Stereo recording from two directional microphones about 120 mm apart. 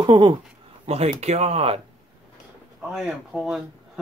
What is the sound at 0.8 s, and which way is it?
Speech, 65° right (ahead or behind).